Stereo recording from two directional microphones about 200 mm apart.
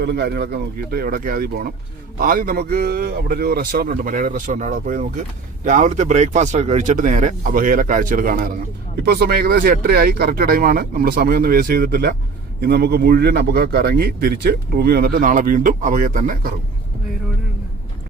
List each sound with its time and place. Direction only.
0.0 s speech: 55° right (ahead or behind)